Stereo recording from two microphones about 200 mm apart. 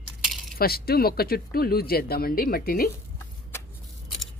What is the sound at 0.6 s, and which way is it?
Speech, 50° left (ahead or behind).